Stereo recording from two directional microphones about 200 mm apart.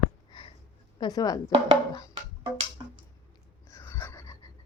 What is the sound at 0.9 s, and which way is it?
Speech, 20° left (ahead or behind).